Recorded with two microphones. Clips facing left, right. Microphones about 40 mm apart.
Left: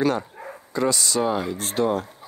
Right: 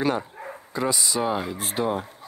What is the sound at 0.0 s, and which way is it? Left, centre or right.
Speech, centre.